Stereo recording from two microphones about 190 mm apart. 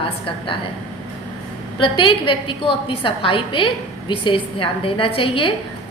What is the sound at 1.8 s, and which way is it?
A woman's voice, 25° left (ahead or behind).